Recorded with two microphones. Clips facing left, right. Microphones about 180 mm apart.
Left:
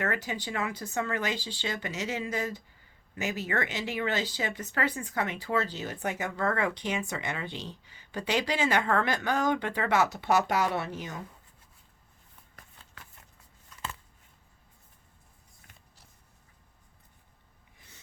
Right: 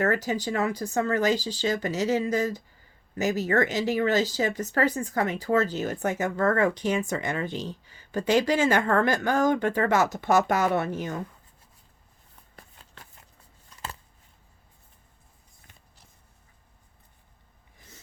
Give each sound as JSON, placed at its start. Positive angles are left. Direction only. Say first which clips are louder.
{"t": 0.0, "sound": "speech", "louder": "right 7 dB", "side_deg": -40}
{"t": 12.5, "sound": "shuffling cards", "louder": "right 5 dB", "side_deg": -30}
{"t": 17.7, "sound": "snort", "louder": "right 6 dB", "side_deg": -40}